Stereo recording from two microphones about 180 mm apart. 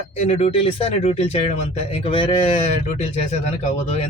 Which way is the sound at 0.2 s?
35° left (ahead or behind).